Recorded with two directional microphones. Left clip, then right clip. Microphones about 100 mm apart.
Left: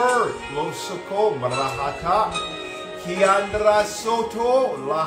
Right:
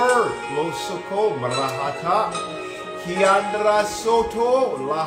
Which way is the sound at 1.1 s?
20° left (ahead or behind).